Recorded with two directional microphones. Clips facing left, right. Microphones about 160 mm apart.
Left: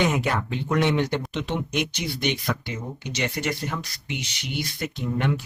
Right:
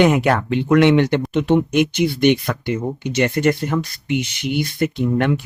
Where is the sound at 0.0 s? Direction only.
65° right (ahead or behind).